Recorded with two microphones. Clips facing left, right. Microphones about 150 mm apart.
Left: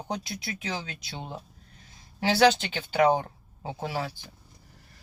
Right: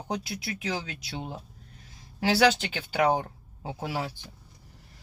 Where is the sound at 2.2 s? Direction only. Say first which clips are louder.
Left 1 dB; 10° right (ahead or behind).